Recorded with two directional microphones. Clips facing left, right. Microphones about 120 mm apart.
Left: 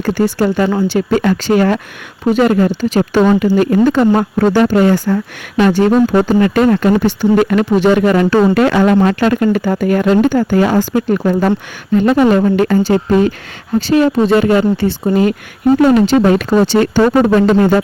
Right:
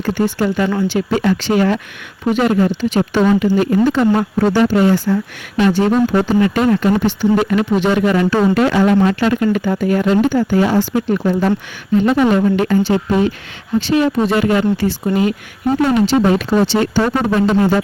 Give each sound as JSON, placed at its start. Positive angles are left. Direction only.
{"t": 0.3, "sound": "speech", "side_deg": 40}
{"t": 1.1, "sound": "speech", "side_deg": 50}
{"t": 8.5, "sound": "speech", "side_deg": 60}
{"t": 16.0, "sound": "speech", "side_deg": 55}